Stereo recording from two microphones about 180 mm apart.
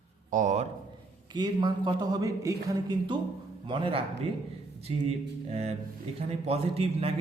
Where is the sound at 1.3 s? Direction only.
25° right (ahead or behind).